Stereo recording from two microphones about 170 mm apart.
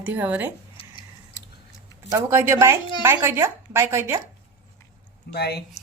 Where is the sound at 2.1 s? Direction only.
15° right (ahead or behind).